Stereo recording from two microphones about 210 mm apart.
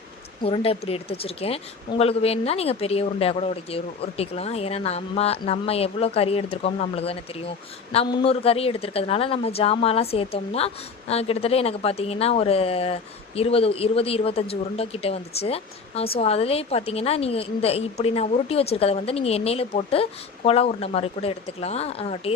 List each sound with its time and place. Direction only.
0.4 s a woman's voice: 25° left (ahead or behind)